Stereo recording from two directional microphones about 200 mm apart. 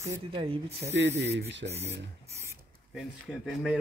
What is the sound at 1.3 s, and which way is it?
Speech, 60° right (ahead or behind).